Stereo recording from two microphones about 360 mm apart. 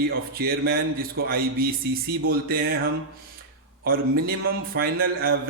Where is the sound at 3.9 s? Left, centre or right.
Right.